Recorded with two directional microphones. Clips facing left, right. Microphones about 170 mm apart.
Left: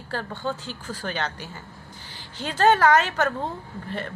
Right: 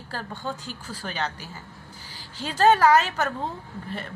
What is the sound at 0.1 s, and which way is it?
A woman's voice, 10° right (ahead or behind).